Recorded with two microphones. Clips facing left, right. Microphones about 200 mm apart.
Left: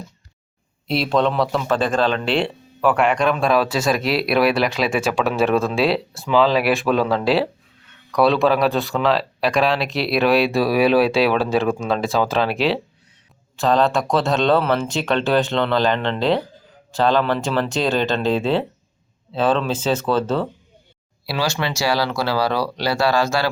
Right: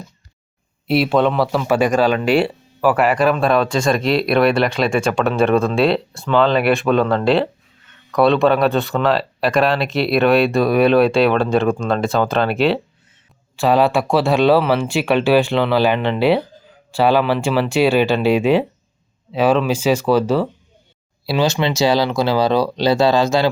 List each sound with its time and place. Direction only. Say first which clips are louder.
0.9 s speech: right 4 dB; 5° right (ahead or behind)
21.2 s speech: right 5 dB; 20° right (ahead or behind)